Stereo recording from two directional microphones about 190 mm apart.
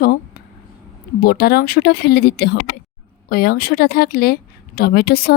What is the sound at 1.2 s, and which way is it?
Speech, 50° left (ahead or behind).